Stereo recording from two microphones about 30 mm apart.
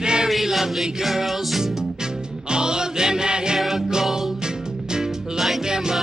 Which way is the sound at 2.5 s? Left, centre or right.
Right.